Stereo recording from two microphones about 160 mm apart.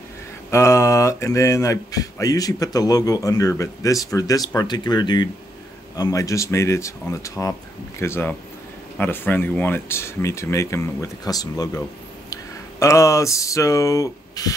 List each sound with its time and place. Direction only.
0.5 s speech: 15° left (ahead or behind)